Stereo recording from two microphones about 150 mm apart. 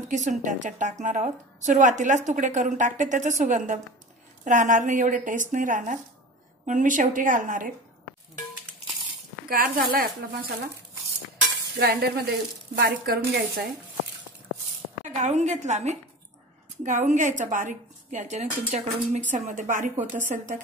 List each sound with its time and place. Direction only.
0.1 s a woman's voice: 55° right (ahead or behind)
9.5 s speech: 75° right (ahead or behind)
11.7 s speech: 90° right
15.0 s a woman's voice: 50° right (ahead or behind)